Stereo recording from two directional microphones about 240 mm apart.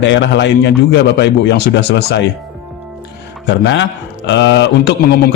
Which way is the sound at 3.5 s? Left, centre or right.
Left.